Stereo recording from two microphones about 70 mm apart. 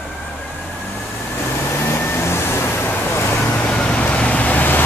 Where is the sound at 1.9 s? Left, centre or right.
Left.